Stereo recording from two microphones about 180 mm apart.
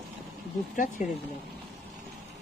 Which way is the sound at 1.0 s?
40° left (ahead or behind).